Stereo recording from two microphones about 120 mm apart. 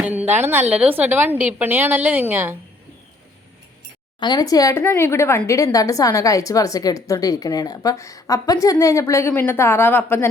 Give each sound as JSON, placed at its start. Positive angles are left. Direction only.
{"t": 0.0, "sound": "a woman's voice", "side_deg": -15}
{"t": 4.2, "sound": "a woman's voice", "side_deg": 35}